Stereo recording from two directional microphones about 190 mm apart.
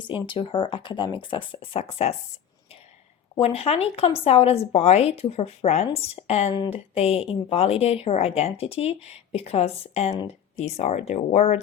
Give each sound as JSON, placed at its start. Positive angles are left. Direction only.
{"t": 0.3, "sound": "speech", "side_deg": 30}
{"t": 3.4, "sound": "speech", "side_deg": 30}